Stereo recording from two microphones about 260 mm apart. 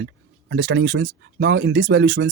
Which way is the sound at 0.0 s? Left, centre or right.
Right.